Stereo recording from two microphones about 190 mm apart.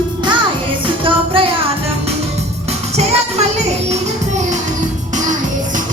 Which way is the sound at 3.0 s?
35° right (ahead or behind).